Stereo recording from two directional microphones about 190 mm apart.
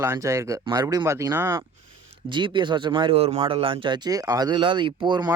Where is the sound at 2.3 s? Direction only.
25° right (ahead or behind).